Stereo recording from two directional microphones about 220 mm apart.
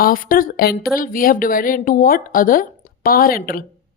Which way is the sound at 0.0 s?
40° left (ahead or behind).